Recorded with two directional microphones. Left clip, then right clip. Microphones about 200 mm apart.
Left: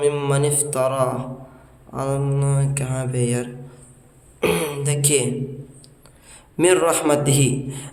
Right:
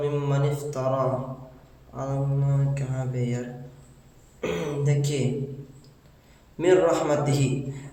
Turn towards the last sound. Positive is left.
turn(degrees=40)  # may be behind; listen again after turning